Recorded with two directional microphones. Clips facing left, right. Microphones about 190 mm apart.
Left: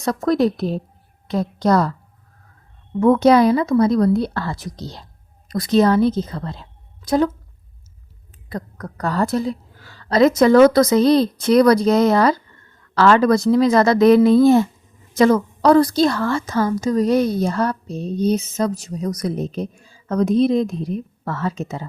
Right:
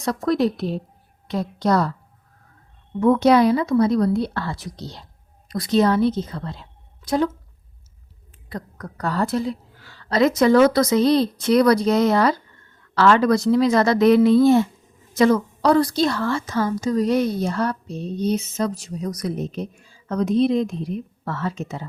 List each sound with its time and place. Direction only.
0.0 s a woman's voice: 45° left (ahead or behind)
3.0 s a woman's voice: 45° left (ahead or behind)
8.4 s a woman's voice: 45° left (ahead or behind)